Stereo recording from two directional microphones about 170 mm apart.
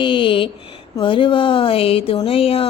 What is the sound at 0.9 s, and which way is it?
Speech, 30° left (ahead or behind).